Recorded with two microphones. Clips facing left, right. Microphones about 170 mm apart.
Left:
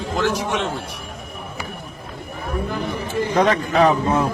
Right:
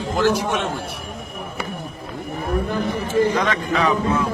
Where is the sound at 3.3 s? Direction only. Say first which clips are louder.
Left 4 dB; 40° left (ahead or behind).